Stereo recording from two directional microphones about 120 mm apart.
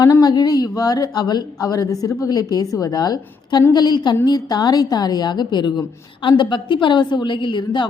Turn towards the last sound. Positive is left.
turn(degrees=40)  # may be behind; listen again after turning